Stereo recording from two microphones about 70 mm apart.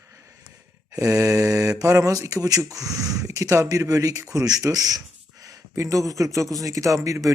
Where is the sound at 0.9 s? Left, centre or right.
Right.